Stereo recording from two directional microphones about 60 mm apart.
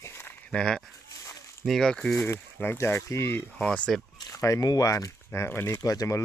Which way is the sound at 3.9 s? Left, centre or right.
Centre.